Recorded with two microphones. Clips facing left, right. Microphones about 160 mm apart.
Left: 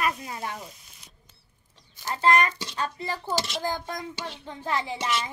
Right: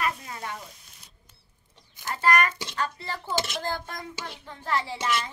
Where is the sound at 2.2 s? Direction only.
25° left (ahead or behind).